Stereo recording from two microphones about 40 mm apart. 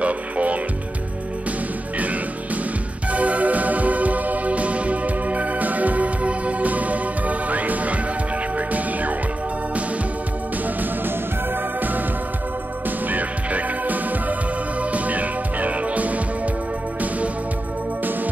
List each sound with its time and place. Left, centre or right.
0.0 s music: right
3.1 s music: right
13.1 s music: right